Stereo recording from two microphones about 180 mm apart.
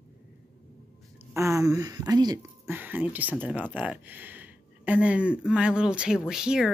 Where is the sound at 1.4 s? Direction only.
15° right (ahead or behind).